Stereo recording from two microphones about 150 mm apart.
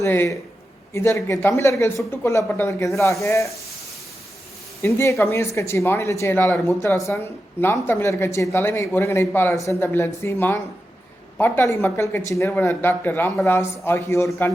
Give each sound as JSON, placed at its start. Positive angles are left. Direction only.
{"t": 0.0, "sound": "speech", "side_deg": 15}
{"t": 4.8, "sound": "speech", "side_deg": 20}